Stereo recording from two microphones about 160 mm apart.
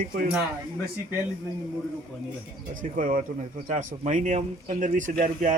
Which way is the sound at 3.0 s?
60° right (ahead or behind).